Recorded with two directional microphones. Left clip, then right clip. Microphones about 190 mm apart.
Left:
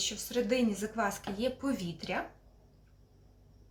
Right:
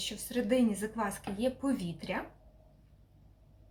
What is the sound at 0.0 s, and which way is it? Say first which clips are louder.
Speech: left 3 dB; 10° left (ahead or behind).